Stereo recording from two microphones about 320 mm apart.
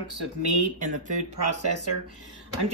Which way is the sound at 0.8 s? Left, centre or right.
Right.